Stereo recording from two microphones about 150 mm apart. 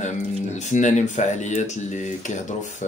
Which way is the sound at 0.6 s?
55° left (ahead or behind).